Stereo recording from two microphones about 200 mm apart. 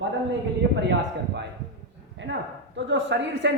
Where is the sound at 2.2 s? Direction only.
65° right (ahead or behind).